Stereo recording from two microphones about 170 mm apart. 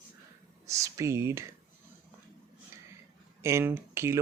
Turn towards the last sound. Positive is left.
turn(degrees=-15)  # may be behind; listen again after turning